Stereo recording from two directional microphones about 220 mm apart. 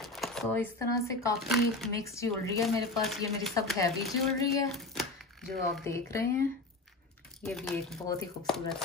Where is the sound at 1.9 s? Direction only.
15° left (ahead or behind).